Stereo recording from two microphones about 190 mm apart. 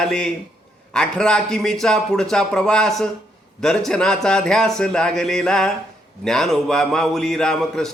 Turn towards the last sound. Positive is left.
turn(degrees=5)  # may be behind; listen again after turning